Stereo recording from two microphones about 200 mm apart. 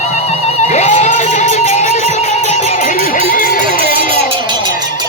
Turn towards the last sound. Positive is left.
turn(degrees=50)  # may be behind; listen again after turning